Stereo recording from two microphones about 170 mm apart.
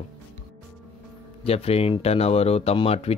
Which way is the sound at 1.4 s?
35° left (ahead or behind).